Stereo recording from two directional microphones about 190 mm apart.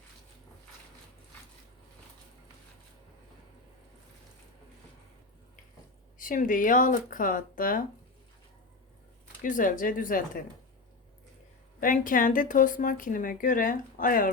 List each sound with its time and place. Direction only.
6.1 s speech: 45° left (ahead or behind)
9.4 s speech: 45° left (ahead or behind)
11.8 s speech: 45° left (ahead or behind)